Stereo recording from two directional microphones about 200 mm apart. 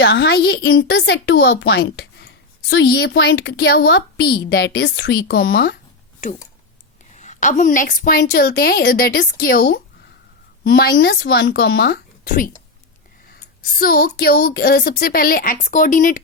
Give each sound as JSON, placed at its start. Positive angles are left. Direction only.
{"t": 0.0, "sound": "speech", "side_deg": 55}
{"t": 7.0, "sound": "speech", "side_deg": 35}